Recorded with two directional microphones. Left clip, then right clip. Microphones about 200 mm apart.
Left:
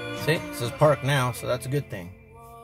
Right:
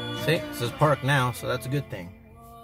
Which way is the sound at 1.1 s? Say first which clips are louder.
Even; 5° left (ahead or behind).